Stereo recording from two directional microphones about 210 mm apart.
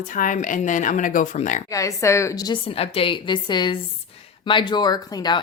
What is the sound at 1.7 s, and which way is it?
A woman's voice, 15° left (ahead or behind).